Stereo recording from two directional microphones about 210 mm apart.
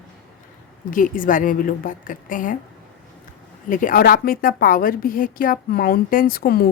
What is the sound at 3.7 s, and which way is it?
A woman's voice, 40° left (ahead or behind).